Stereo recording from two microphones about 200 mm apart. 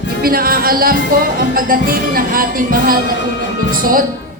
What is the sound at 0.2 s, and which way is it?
Music, 45° right (ahead or behind).